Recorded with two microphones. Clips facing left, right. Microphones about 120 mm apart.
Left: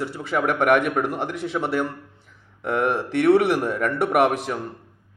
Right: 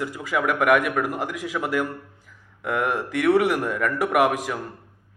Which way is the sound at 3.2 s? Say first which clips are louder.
Left 2 dB; 30° left (ahead or behind).